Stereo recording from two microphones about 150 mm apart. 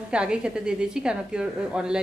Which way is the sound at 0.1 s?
5° right (ahead or behind).